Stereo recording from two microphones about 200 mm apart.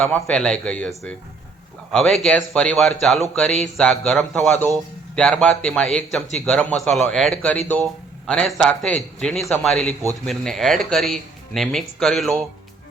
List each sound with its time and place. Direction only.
0.0 s speech: 5° left (ahead or behind)